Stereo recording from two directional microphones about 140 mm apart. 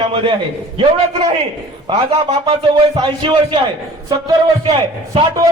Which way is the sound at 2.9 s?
35° right (ahead or behind).